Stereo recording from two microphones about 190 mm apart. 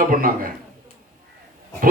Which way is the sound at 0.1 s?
50° right (ahead or behind).